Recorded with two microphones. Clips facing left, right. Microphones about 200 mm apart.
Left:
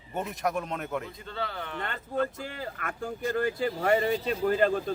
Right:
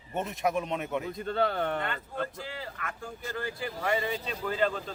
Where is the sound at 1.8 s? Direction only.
45° left (ahead or behind).